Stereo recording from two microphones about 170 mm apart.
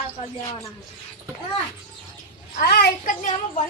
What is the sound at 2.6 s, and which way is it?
Speech, 65° left (ahead or behind).